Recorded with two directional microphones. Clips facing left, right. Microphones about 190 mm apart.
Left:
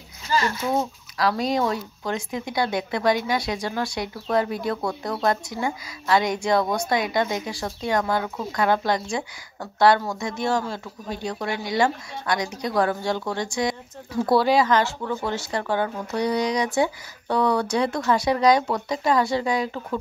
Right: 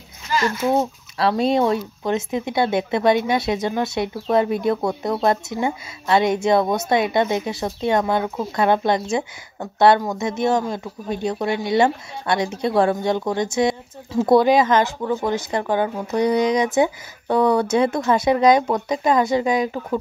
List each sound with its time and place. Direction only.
0.7 s speech: 25° right (ahead or behind)